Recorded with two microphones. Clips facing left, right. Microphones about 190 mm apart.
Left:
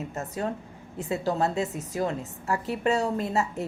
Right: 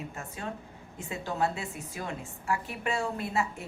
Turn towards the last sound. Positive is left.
turn(degrees=40)  # may be behind; listen again after turning